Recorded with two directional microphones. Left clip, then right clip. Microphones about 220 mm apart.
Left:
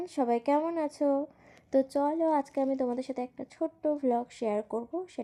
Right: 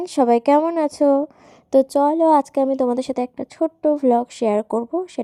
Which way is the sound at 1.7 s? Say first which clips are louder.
Right 12 dB; 30° right (ahead or behind).